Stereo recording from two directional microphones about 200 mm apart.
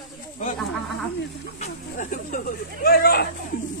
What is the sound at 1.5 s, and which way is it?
Speech, 40° left (ahead or behind).